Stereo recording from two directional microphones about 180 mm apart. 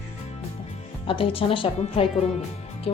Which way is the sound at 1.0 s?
30° left (ahead or behind).